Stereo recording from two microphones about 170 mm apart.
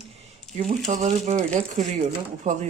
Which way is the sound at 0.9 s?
45° right (ahead or behind).